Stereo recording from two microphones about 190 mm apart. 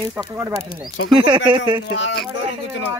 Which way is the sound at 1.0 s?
90° left.